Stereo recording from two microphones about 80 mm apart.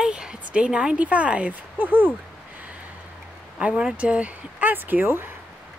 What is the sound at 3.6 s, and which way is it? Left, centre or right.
Speech, centre.